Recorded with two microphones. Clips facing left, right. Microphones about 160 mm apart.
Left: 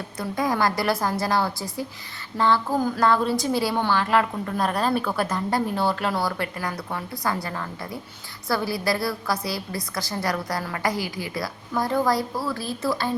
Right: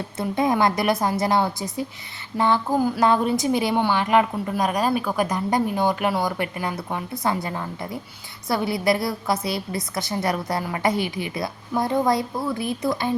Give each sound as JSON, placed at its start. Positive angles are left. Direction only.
{"t": 0.2, "sound": "a woman's voice", "side_deg": -25}